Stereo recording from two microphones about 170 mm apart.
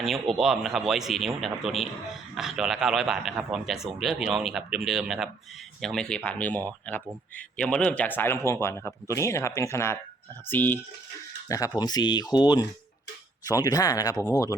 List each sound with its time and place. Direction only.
0.0 s a man's voice: centre (ahead or behind); by 14.5 s 20° left (ahead or behind)